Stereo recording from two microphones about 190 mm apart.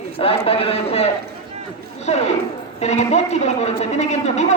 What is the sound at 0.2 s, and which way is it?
A woman's voice, 30° left (ahead or behind).